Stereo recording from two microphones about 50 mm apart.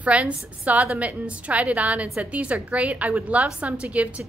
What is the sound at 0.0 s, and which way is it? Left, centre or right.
A woman's voice, right.